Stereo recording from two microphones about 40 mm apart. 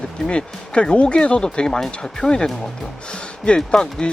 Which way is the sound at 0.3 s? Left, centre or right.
Left.